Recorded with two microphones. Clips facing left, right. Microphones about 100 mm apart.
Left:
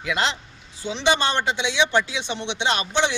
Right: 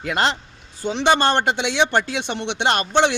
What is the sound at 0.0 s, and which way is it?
A man's voice, 50° right (ahead or behind).